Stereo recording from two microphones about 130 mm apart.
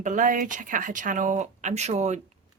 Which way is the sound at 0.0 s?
80° right.